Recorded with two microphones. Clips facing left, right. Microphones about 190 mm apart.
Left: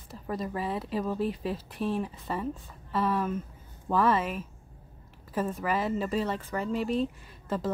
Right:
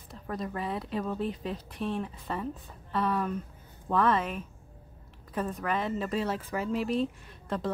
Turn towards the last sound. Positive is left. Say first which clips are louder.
# left 1 dB
turn(degrees=0)  # may be behind; listen again after turning